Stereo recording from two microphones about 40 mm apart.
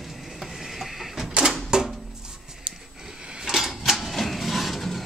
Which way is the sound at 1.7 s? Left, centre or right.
Centre.